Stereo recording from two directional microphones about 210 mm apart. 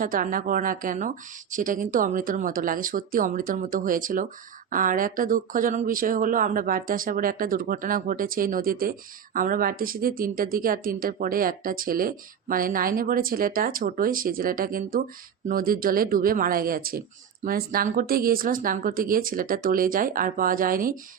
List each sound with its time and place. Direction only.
0.0 s speech: 40° right (ahead or behind)